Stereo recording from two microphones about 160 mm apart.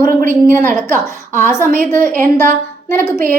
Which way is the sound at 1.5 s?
15° left (ahead or behind).